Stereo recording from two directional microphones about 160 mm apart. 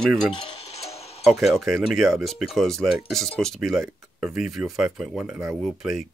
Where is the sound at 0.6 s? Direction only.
40° left (ahead or behind).